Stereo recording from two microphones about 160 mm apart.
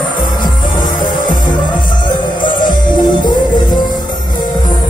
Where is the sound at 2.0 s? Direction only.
30° left (ahead or behind).